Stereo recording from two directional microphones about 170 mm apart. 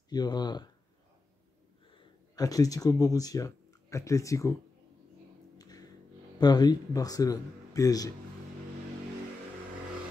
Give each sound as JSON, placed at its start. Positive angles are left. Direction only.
{"t": 0.1, "sound": "speech", "side_deg": 25}
{"t": 2.3, "sound": "speech", "side_deg": 20}
{"t": 5.6, "sound": "music", "side_deg": 20}
{"t": 6.4, "sound": "speech", "side_deg": 25}